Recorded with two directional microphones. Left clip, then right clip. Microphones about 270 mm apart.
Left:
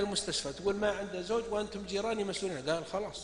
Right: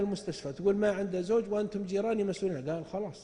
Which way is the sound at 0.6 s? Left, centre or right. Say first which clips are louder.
Right 5 dB; right.